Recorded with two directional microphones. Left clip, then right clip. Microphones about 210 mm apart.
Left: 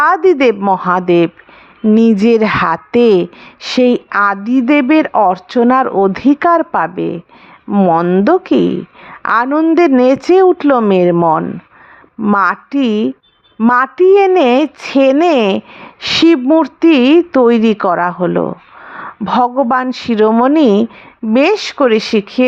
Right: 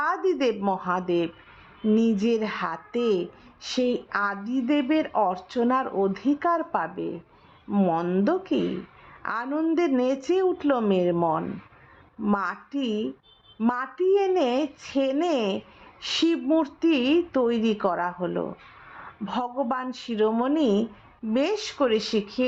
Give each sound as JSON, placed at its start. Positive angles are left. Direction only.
{"t": 0.0, "sound": "speech", "side_deg": 35}